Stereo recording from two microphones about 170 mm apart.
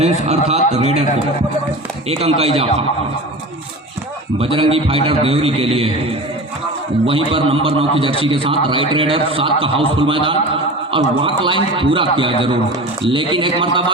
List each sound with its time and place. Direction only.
0.0 s a man's voice: 40° right (ahead or behind)
2.0 s a man's voice: 35° right (ahead or behind)
4.4 s a man's voice: 35° right (ahead or behind)
7.0 s a man's voice: 35° right (ahead or behind)